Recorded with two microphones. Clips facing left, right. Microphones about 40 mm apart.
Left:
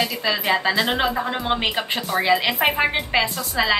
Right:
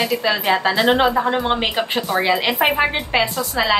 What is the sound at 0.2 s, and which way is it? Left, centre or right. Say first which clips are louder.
A woman's voice: right 3 dB; centre.